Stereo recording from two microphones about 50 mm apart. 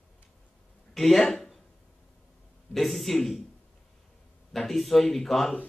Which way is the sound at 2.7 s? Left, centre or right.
Centre.